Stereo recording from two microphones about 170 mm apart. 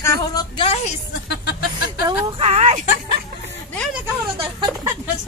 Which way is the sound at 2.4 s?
40° right (ahead or behind).